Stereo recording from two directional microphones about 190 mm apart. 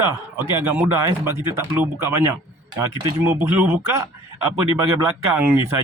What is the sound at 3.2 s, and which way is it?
Speech, 10° right (ahead or behind).